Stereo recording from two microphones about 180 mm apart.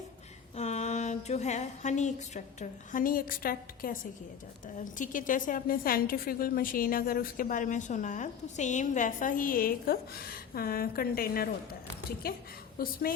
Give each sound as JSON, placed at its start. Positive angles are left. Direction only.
{"t": 0.5, "sound": "speech", "side_deg": 40}
{"t": 4.9, "sound": "a woman's voice", "side_deg": 45}